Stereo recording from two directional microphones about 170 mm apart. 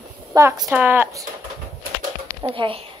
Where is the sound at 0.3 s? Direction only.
20° right (ahead or behind).